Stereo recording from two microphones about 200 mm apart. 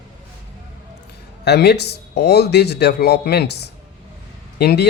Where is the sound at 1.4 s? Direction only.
55° left (ahead or behind).